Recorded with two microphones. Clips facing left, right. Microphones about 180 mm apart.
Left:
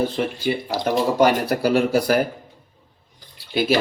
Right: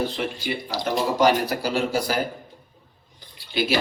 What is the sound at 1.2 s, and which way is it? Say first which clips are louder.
Speech: left 2 dB; 60° left (ahead or behind).